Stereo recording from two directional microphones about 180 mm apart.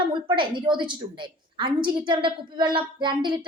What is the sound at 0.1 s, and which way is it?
A woman's voice, 25° right (ahead or behind).